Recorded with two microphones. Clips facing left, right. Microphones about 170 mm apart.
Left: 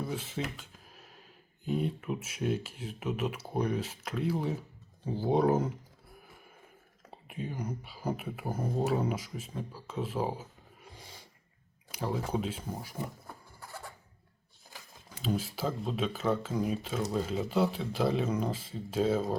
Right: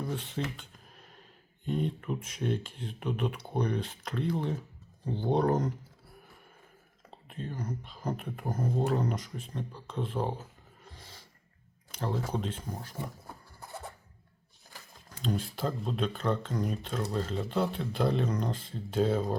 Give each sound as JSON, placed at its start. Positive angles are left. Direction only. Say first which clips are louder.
{"t": 0.0, "sound": "a sound", "louder": "right 1 dB", "side_deg": 5}
{"t": 1.6, "sound": "speech", "louder": "even", "side_deg": 5}
{"t": 7.1, "sound": "speech", "louder": "left 1 dB", "side_deg": 10}
{"t": 10.8, "sound": "roar", "louder": "left 1 dB", "side_deg": 10}
{"t": 11.9, "sound": "speech", "louder": "even", "side_deg": 5}
{"t": 13.6, "sound": "a sound", "louder": "right 3 dB", "side_deg": -20}
{"t": 15.2, "sound": "speech", "louder": "even", "side_deg": 5}